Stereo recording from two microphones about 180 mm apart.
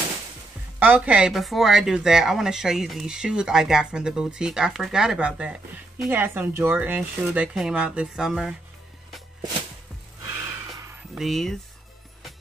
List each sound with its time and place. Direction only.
0.7 s speech: 10° right (ahead or behind)
10.2 s gasp: 15° right (ahead or behind)
11.1 s speech: centre (ahead or behind)